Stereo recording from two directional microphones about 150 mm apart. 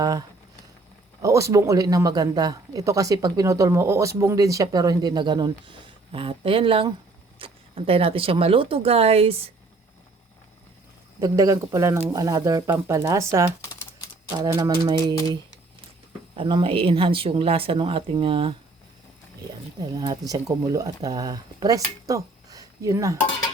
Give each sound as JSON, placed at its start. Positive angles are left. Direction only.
{"t": 0.0, "sound": "speech", "side_deg": -25}
{"t": 11.2, "sound": "speech", "side_deg": -20}
{"t": 16.3, "sound": "speech", "side_deg": -35}
{"t": 19.8, "sound": "speech", "side_deg": -25}